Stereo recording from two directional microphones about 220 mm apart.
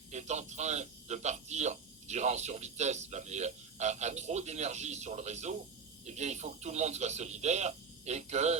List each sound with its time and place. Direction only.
0.1 s speech: 30° right (ahead or behind)